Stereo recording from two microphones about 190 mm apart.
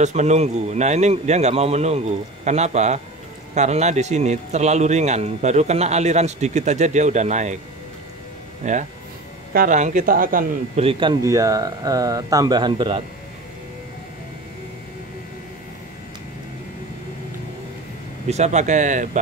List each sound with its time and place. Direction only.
0.0 s a man's voice: 35° right (ahead or behind)
8.6 s a man's voice: 40° right (ahead or behind)
10.8 s speech: 25° right (ahead or behind)
18.3 s a man's voice: 35° right (ahead or behind)